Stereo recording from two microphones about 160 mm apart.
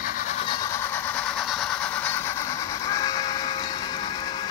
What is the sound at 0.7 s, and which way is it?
Vehicle, 15° left (ahead or behind).